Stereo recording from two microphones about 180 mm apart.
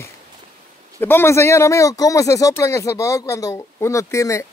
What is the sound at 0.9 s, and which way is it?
Speech, 15° left (ahead or behind).